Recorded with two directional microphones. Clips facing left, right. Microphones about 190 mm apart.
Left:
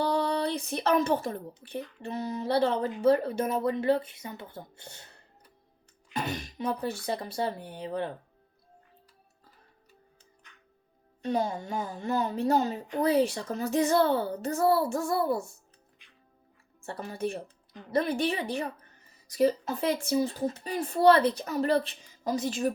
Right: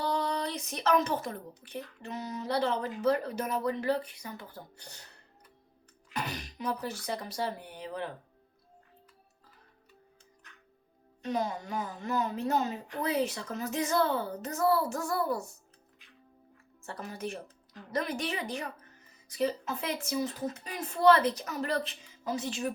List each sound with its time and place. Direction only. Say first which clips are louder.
0.0 s speech: left 4 dB; 30° left (ahead or behind)
6.1 s speech: left 4 dB; 25° left (ahead or behind)
11.2 s speech: left 3 dB; 30° left (ahead or behind)
16.8 s speech: left 5 dB; 30° left (ahead or behind)
19.3 s speech: left 6 dB; 40° left (ahead or behind)